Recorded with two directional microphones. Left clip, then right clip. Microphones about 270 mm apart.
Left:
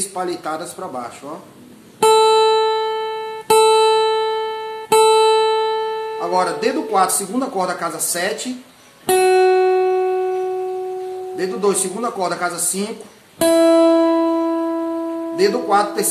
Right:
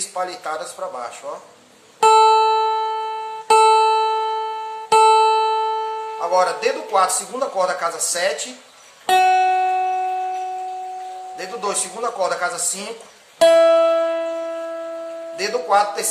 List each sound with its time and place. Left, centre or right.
0.1 s speech: centre
2.0 s music: left
6.1 s speech: centre
9.0 s music: left
11.3 s speech: centre
13.4 s music: left
15.3 s speech: centre